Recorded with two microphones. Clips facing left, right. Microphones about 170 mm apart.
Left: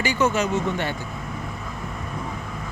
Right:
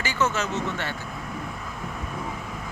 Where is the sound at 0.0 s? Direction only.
15° left (ahead or behind).